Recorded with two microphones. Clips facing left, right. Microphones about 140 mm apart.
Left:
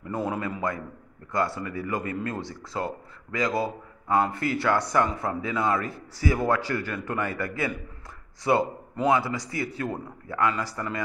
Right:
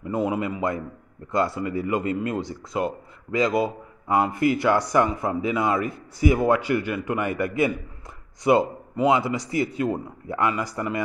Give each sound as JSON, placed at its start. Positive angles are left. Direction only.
{"t": 0.0, "sound": "a man's voice", "side_deg": -15}